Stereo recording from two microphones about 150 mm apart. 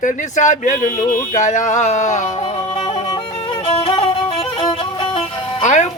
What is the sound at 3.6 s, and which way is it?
Music, 40° left (ahead or behind).